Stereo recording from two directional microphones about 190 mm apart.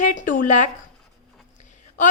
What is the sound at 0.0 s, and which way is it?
A woman's voice, 40° left (ahead or behind).